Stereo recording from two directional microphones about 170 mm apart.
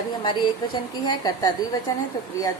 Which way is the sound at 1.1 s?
25° left (ahead or behind).